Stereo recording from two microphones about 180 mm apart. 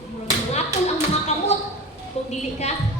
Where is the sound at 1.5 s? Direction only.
35° left (ahead or behind).